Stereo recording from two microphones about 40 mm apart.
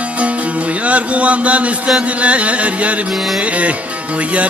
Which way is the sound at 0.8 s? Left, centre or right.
Right.